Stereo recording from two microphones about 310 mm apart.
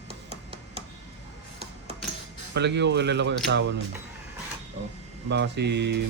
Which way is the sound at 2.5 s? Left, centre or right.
Right.